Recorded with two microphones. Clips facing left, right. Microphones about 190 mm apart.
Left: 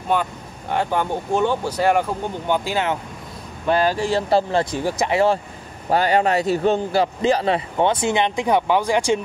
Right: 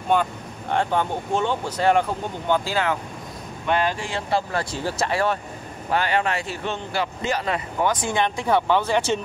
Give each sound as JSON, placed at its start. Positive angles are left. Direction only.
{"t": 0.1, "sound": "speech", "side_deg": 5}
{"t": 3.6, "sound": "speech", "side_deg": 35}
{"t": 5.9, "sound": "speech", "side_deg": 40}